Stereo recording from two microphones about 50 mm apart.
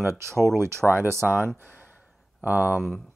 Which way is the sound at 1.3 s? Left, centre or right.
Right.